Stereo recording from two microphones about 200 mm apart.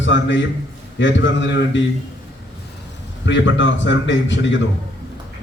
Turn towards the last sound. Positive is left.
turn(degrees=65)  # may be behind; listen again after turning